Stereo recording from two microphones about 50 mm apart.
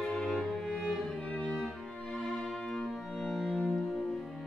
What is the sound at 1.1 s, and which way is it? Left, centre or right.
Music, left.